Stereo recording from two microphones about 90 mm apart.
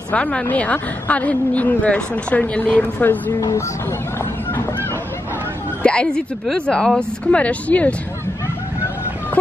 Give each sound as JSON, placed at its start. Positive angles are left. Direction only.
{"t": 0.1, "sound": "a woman's voice", "side_deg": 15}
{"t": 3.3, "sound": "speech", "side_deg": 35}
{"t": 5.8, "sound": "a sound", "side_deg": 10}
{"t": 6.4, "sound": "a woman's voice", "side_deg": 10}